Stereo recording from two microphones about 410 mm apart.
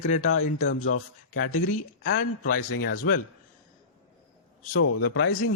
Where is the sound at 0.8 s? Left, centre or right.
Left.